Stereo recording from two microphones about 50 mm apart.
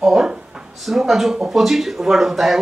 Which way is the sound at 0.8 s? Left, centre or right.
Centre.